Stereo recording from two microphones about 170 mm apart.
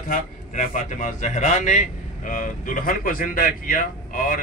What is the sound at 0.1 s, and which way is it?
A man's voice, 50° left (ahead or behind).